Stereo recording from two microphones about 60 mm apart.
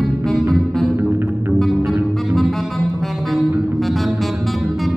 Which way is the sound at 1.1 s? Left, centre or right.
Right.